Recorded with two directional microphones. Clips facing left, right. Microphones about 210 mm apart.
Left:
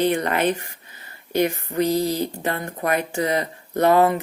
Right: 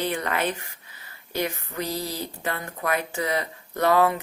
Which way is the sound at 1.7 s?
20° left (ahead or behind).